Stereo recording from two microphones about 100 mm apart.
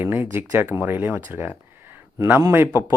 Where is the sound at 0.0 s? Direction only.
20° right (ahead or behind).